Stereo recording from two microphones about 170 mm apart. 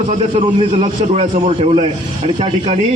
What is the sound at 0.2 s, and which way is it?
A man's voice, 40° right (ahead or behind).